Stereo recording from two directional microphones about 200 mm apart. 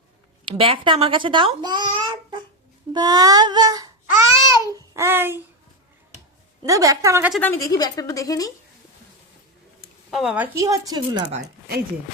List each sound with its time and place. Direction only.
0.4 s a child's voice: 25° right (ahead or behind)
2.9 s babbling: 20° right (ahead or behind)
6.6 s a woman's voice: 15° right (ahead or behind)
7.3 s a woman's voice: 10° left (ahead or behind)
10.1 s a woman's voice: 5° right (ahead or behind); by 11.2 s 20° right (ahead or behind)